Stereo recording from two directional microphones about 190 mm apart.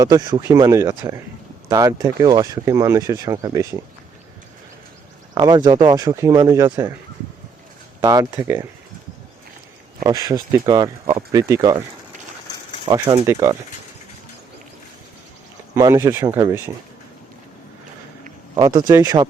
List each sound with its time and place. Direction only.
0.0 s speech: 20° right (ahead or behind)
5.3 s speech: 20° right (ahead or behind)
8.0 s speech: 15° right (ahead or behind)
10.0 s speech: 20° right (ahead or behind)
12.8 s speech: 25° right (ahead or behind)
15.7 s speech: 15° right (ahead or behind)
18.5 s speech: 20° right (ahead or behind)